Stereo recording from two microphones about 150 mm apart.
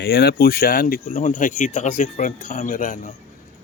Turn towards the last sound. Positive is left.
turn(degrees=60)  # may be behind; listen again after turning